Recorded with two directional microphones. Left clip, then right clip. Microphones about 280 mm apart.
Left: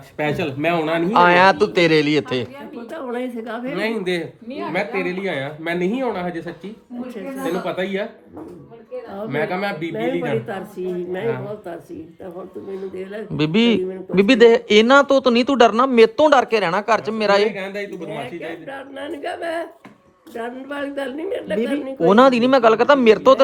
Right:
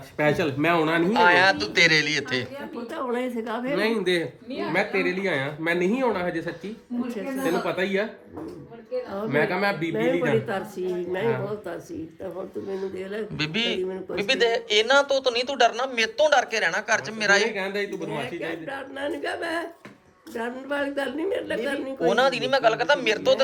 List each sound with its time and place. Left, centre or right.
0.2 s speech: centre
1.1 s a man's voice: centre
2.9 s speech: centre
9.3 s speech: centre
13.3 s a man's voice: centre
22.1 s speech: centre